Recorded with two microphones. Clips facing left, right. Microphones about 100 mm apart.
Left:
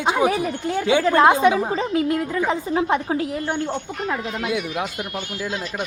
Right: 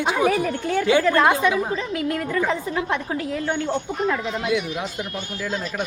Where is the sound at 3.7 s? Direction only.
5° left (ahead or behind).